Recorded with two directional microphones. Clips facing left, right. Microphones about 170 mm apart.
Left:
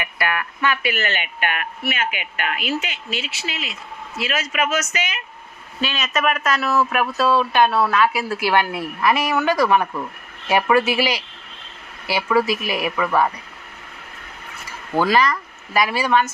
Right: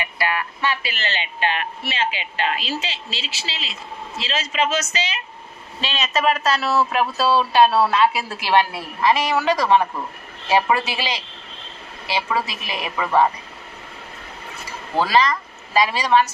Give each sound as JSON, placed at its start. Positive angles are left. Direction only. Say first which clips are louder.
{"t": 0.0, "sound": "speech", "louder": "even", "side_deg": -25}
{"t": 15.1, "sound": "speech", "louder": "right 1 dB", "side_deg": -20}